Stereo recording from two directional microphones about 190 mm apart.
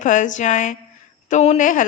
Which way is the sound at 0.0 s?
40° left (ahead or behind).